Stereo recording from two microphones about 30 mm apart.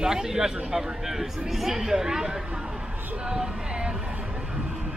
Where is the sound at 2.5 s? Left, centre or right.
Right.